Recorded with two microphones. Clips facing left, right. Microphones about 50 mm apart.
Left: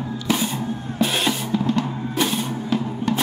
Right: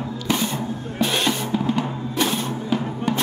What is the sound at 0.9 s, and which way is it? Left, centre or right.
Music, centre.